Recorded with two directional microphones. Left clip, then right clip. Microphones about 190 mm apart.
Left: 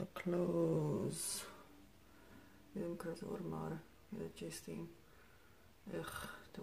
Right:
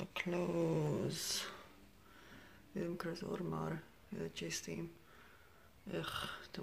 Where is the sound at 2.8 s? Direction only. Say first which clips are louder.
Right 2 dB; 5° right (ahead or behind).